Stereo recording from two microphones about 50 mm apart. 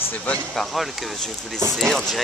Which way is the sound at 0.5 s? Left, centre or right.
Centre.